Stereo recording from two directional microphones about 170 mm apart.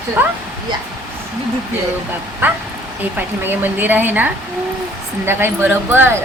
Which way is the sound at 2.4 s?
10° right (ahead or behind).